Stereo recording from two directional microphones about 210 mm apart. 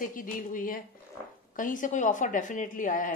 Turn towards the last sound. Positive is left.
turn(degrees=40)  # may be behind; listen again after turning